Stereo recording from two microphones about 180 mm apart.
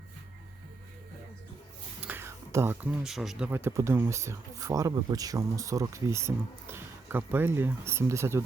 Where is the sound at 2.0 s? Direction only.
10° right (ahead or behind).